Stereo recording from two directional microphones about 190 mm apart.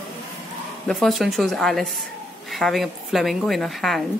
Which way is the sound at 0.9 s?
Centre (ahead or behind).